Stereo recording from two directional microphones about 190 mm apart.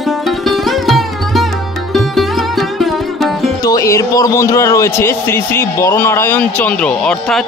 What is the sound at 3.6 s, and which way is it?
Speech, 20° left (ahead or behind).